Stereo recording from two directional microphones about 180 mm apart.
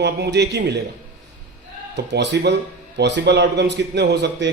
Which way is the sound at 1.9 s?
75° right (ahead or behind).